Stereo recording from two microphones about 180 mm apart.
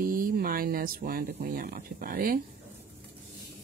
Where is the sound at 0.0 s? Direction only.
50° right (ahead or behind).